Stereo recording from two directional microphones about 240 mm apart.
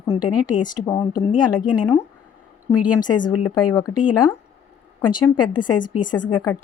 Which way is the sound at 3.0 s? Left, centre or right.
Centre.